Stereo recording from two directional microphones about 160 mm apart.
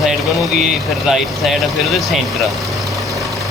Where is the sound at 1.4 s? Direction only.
Centre (ahead or behind).